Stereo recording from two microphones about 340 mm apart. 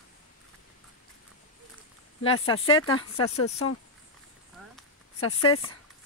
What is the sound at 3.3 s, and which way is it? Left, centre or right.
Speech, left.